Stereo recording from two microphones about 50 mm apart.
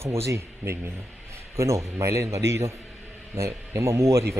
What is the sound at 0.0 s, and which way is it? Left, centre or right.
Speech, right.